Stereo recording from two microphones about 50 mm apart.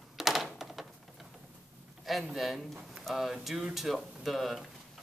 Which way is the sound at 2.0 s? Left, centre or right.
Centre.